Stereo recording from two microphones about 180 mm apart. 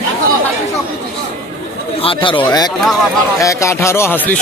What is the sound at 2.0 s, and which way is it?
A man's voice, 30° left (ahead or behind).